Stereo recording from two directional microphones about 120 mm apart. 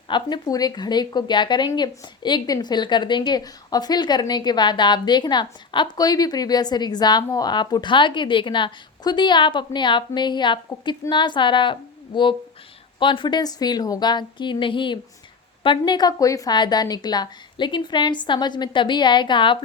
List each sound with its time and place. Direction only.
0.1 s speech: 35° left (ahead or behind)